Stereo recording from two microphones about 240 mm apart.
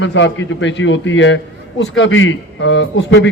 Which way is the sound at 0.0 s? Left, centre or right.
Left.